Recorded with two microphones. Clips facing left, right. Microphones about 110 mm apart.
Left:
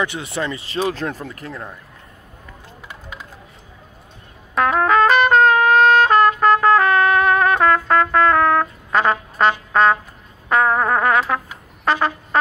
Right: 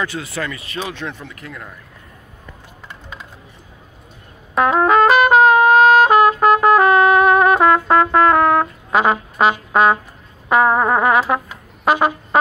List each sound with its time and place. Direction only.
0.0 s speech: 20° left (ahead or behind); by 1.6 s 40° left (ahead or behind)
2.9 s music: 5° left (ahead or behind)
4.6 s trumpet: 10° right (ahead or behind)
10.5 s brass instrument: 10° right (ahead or behind)